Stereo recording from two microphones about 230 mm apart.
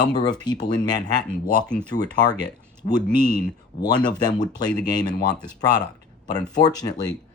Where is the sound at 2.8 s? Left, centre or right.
Left.